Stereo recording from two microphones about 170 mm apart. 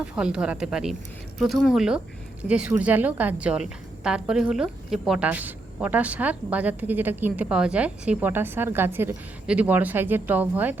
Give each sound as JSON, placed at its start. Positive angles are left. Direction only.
{"t": 0.0, "sound": "a woman's voice", "side_deg": -5}